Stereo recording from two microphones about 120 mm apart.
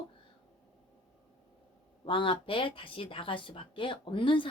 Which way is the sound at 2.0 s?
45° left (ahead or behind).